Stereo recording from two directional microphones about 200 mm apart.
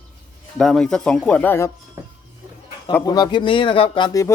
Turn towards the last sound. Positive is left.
turn(degrees=15)  # may be behind; listen again after turning